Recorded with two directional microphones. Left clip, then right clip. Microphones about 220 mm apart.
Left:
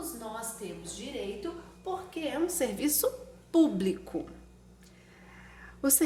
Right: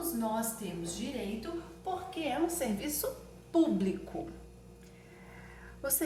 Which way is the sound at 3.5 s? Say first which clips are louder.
Left 3 dB; 55° left (ahead or behind).